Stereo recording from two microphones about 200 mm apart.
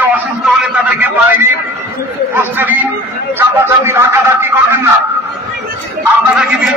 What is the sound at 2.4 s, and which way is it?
A man's voice, 10° right (ahead or behind).